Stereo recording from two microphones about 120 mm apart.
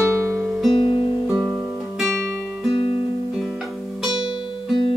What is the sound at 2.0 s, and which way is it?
Music, 5° left (ahead or behind).